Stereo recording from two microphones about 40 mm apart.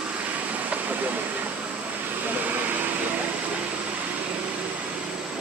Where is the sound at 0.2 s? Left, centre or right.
Right.